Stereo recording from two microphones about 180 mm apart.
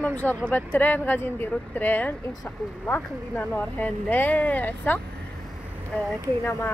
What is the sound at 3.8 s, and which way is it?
Speech, 10° left (ahead or behind).